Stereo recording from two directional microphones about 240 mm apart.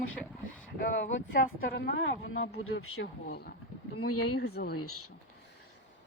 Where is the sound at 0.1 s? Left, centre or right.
Centre.